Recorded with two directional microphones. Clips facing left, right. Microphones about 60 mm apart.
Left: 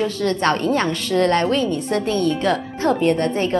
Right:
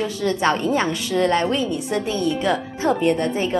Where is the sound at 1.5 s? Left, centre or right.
Left.